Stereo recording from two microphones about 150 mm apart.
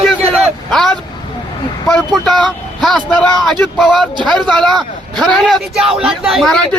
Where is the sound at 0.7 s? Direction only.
5° left (ahead or behind).